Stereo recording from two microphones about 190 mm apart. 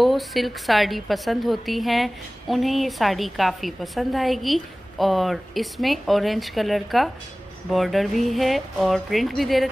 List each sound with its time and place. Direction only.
0.0 s a woman's voice: centre (ahead or behind)